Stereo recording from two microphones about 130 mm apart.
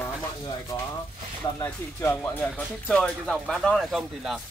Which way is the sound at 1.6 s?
20° left (ahead or behind).